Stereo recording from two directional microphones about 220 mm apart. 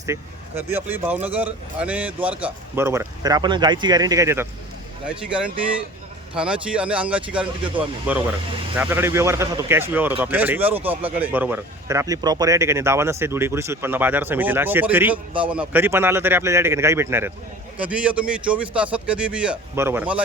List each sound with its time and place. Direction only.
0.0 s speech: 10° right (ahead or behind)